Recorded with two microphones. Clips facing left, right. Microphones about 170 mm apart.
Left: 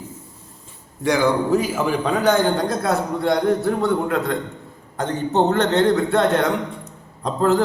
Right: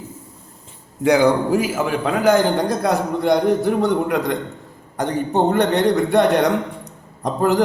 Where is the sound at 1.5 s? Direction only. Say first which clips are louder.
Even; 5° right (ahead or behind).